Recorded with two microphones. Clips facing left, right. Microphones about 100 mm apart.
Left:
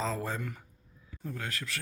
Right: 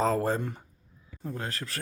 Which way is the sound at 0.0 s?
50° right (ahead or behind).